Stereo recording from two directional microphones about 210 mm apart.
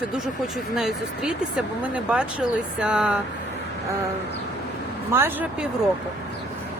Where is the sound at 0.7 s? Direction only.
5° right (ahead or behind).